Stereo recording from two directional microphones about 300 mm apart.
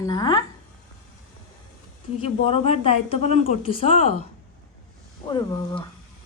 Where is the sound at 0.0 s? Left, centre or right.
Centre.